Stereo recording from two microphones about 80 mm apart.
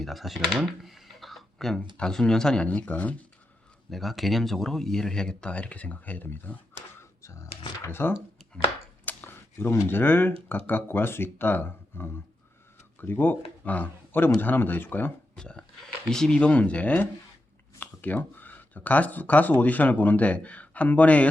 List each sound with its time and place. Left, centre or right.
0.0 s speech: centre
2.6 s speech: centre
3.8 s speech: centre; by 6.6 s left
7.2 s speech: left
15.4 s speech: centre